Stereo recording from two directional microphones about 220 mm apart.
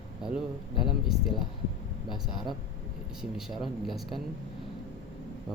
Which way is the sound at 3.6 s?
Centre (ahead or behind).